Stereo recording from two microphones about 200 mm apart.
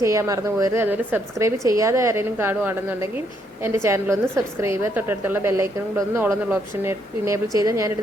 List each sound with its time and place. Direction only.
0.0 s a woman's voice: 15° right (ahead or behind)